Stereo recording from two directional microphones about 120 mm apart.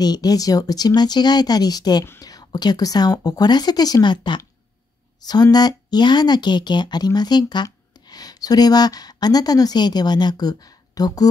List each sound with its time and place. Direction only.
0.0 s speech: 35° left (ahead or behind)